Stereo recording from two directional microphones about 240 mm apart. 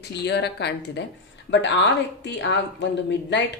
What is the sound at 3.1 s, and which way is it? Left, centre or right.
Speech, left.